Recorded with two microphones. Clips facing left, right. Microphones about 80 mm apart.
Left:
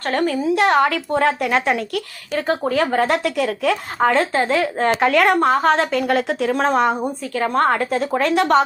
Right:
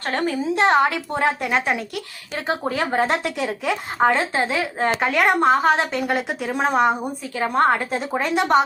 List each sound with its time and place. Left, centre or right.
0.0 s a woman's voice: right; by 5.1 s centre
5.1 s a woman's voice: centre